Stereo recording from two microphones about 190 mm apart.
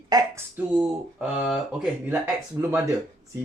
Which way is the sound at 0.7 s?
5° right (ahead or behind).